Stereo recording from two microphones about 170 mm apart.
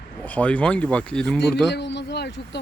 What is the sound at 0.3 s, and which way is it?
Speech, 10° left (ahead or behind).